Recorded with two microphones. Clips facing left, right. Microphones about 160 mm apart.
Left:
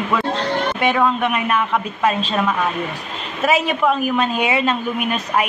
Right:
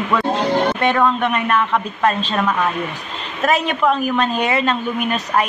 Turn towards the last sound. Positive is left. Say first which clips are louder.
# right 1 dB
turn(degrees=5)  # may be behind; listen again after turning